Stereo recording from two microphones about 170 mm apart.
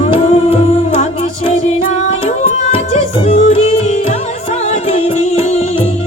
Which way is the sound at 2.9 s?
40° left (ahead or behind).